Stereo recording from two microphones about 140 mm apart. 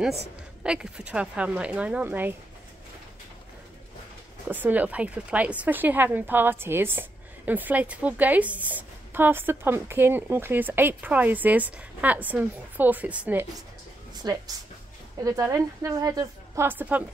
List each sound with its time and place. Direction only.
0.7 s speech: 5° right (ahead or behind)
4.5 s speech: 10° right (ahead or behind)
14.1 s a sound: 25° right (ahead or behind)
15.2 s a woman's voice: 25° right (ahead or behind)